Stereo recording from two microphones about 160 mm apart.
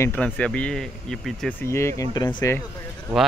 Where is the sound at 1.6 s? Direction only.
15° left (ahead or behind).